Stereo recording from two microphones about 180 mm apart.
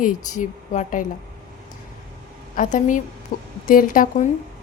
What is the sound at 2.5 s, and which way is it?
Speech, 45° left (ahead or behind).